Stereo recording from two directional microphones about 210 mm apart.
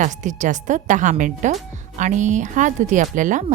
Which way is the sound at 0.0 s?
35° right (ahead or behind).